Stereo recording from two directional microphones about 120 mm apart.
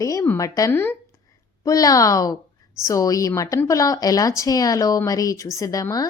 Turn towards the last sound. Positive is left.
turn(degrees=30)  # may be behind; listen again after turning